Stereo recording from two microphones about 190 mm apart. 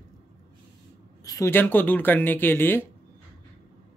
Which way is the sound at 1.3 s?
15° left (ahead or behind).